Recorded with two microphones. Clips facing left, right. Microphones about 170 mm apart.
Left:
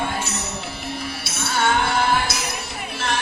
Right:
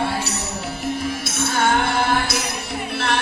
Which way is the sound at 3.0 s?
60° right (ahead or behind).